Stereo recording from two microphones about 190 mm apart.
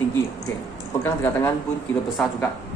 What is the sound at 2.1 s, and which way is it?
Speech, centre (ahead or behind).